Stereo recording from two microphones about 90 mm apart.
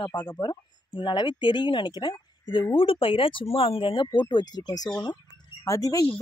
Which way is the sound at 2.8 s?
80° left.